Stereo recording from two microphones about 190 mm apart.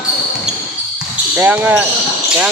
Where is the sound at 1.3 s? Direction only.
10° right (ahead or behind).